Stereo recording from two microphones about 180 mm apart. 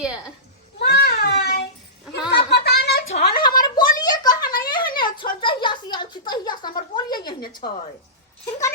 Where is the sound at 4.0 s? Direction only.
20° left (ahead or behind).